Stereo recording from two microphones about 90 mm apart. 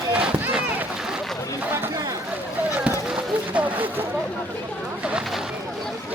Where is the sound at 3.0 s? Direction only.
10° right (ahead or behind).